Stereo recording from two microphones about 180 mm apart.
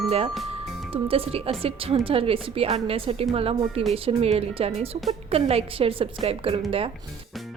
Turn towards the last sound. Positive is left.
turn(degrees=-30)  # may be behind; listen again after turning